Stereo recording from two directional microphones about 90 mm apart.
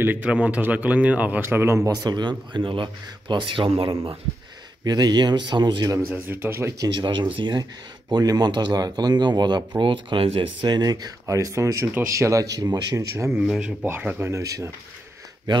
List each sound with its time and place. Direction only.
0.0 s a man's voice: 20° right (ahead or behind)
1.8 s speech: 50° right (ahead or behind); by 4.1 s 90° right
4.8 s speech: 50° right (ahead or behind)
6.0 s speech: 25° right (ahead or behind)
6.9 s speech: 65° right (ahead or behind)
8.1 s speech: 50° right (ahead or behind)
9.8 s speech: 65° right (ahead or behind); by 10.5 s 90° right
10.6 s speech: 50° right (ahead or behind); by 13.4 s 35° right (ahead or behind)
13.5 s a man's voice: 10° right (ahead or behind)
14.2 s speech: 35° right (ahead or behind)